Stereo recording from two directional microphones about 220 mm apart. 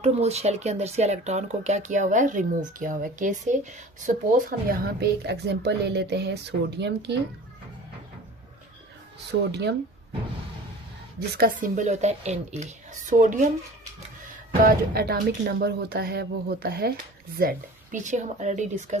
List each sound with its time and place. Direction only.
0.0 s speech: 30° right (ahead or behind)
4.9 s speech: 50° right (ahead or behind)
9.5 s speech: 50° right (ahead or behind)
11.3 s speech: 40° right (ahead or behind)
14.6 s speech: 45° right (ahead or behind)